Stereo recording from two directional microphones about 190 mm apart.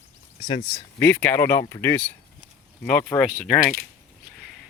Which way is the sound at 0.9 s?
10° left (ahead or behind).